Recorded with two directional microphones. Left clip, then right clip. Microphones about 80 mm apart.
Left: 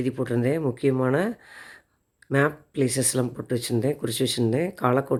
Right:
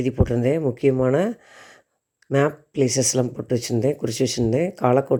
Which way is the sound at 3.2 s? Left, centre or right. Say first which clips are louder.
Right 3 dB; centre.